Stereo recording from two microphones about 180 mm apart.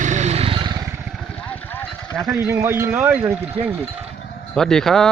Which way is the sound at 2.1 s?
15° right (ahead or behind).